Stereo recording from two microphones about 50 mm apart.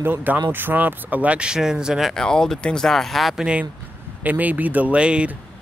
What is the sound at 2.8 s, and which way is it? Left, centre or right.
Speech, centre.